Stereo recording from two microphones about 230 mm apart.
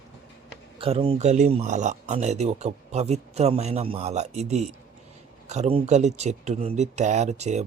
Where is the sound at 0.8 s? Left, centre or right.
Right.